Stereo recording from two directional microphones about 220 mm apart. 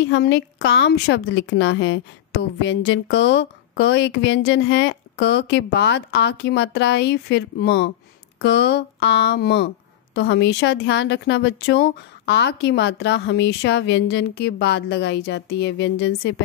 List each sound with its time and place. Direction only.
0.0 s a woman's voice: 50° left (ahead or behind)